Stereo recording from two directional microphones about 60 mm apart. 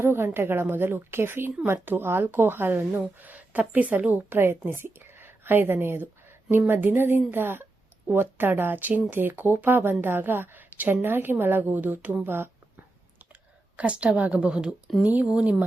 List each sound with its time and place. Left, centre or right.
0.0 s a woman's voice: right
4.4 s a woman's voice: right
12.2 s a sound: right
13.7 s a woman's voice: right